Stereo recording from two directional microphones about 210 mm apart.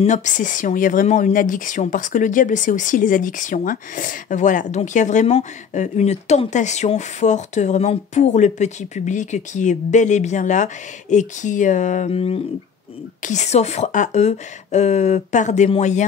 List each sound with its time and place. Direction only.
0.0 s speech: 35° left (ahead or behind)